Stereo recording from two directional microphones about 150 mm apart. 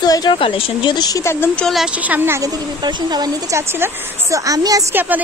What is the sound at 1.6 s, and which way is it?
Speech, centre (ahead or behind).